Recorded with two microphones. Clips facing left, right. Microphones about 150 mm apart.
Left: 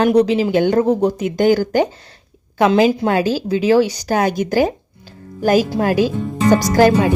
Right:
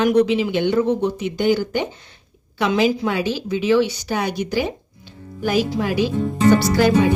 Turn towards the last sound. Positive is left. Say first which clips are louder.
# left 3 dB
turn(degrees=45)  # may be behind; listen again after turning